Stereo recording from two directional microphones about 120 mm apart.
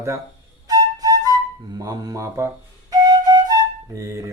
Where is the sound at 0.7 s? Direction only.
30° right (ahead or behind).